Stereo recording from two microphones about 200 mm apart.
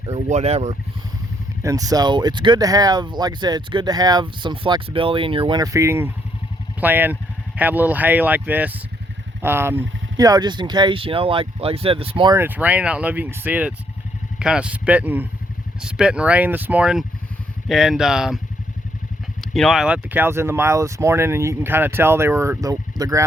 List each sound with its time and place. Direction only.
0.0 s speech: 35° right (ahead or behind)
1.6 s speech: 15° right (ahead or behind)
12.4 s speech: 10° right (ahead or behind)
19.4 s speech: centre (ahead or behind); by 23.2 s 20° right (ahead or behind)